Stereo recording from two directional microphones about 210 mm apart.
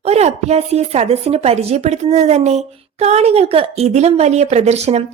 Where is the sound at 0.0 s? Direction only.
30° right (ahead or behind).